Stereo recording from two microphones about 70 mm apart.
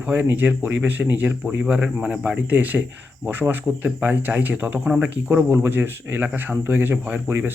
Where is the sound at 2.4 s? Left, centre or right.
Right.